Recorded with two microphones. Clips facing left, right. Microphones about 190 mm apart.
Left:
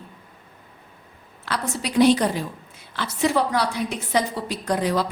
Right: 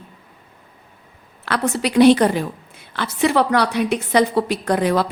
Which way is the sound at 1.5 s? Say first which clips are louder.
Right 7 dB; 65° right (ahead or behind).